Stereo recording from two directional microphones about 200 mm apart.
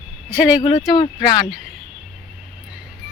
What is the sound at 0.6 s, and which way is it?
Speech, 20° left (ahead or behind).